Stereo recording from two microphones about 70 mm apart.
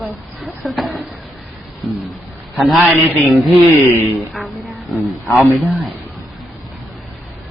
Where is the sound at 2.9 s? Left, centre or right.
Right.